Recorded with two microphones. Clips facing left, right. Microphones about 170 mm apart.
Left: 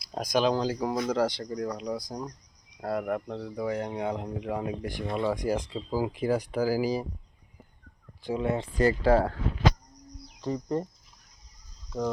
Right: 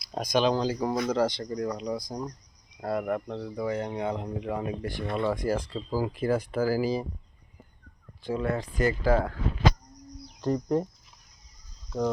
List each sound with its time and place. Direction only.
0.1 s speech: 5° left (ahead or behind)
8.2 s speech: 15° left (ahead or behind)
10.4 s speech: 5° right (ahead or behind)